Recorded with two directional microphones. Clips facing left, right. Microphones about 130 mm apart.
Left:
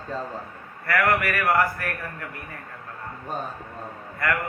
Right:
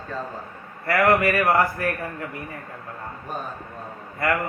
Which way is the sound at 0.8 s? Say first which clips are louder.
Right 4 dB; 25° right (ahead or behind).